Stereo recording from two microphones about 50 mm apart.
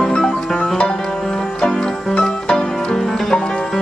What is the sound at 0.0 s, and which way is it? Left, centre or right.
Music, centre.